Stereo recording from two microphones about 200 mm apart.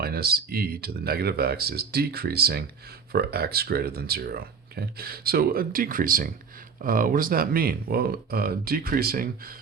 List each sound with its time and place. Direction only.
0.0 s speech: 50° right (ahead or behind)